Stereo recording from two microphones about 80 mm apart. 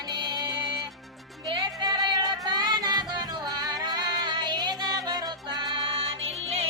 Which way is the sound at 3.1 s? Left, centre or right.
Right.